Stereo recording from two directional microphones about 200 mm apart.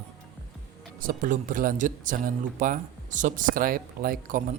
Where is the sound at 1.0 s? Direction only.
40° right (ahead or behind).